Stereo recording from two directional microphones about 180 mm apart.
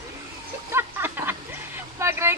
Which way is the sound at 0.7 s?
15° right (ahead or behind).